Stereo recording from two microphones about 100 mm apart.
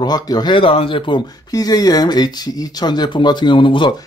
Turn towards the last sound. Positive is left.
turn(degrees=55)  # may be behind; listen again after turning